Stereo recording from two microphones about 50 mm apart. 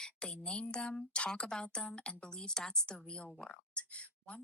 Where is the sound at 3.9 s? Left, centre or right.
Left.